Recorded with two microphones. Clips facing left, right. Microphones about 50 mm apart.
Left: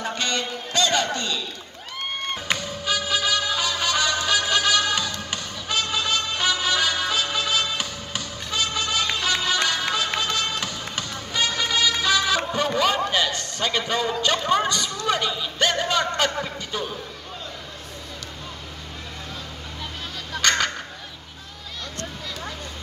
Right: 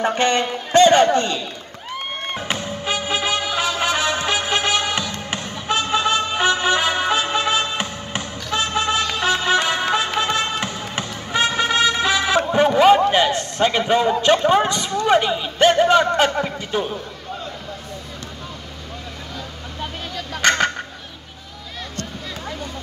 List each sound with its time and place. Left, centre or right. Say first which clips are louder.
0.0 s a man's voice: right 8 dB; right
2.6 s music: right 2 dB; right
10.6 s basketball bounce: right 4 dB; right
20.3 s a sound: right 4 dB; right